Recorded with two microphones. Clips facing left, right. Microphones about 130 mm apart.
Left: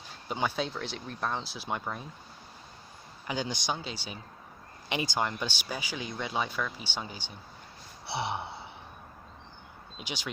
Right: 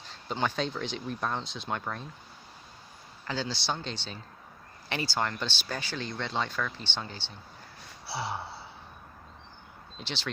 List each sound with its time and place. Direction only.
0.0 s speech: 10° left (ahead or behind)
3.2 s speech: 15° left (ahead or behind)
8.0 s gasp: 20° left (ahead or behind)
10.0 s speech: 10° left (ahead or behind)